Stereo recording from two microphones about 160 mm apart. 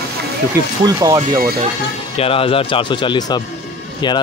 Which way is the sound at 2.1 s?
35° left (ahead or behind).